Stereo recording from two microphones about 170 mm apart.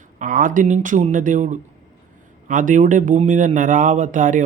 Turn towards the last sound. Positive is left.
turn(degrees=-50)  # may be behind; listen again after turning